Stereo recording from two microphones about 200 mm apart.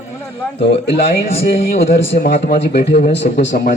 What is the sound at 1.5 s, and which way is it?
A man's voice, 50° left (ahead or behind).